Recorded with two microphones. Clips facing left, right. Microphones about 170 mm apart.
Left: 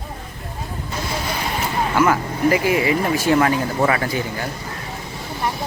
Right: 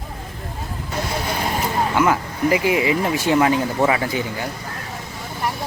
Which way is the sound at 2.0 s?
15° right (ahead or behind).